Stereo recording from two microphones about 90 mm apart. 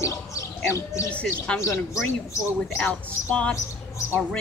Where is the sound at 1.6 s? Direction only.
35° left (ahead or behind).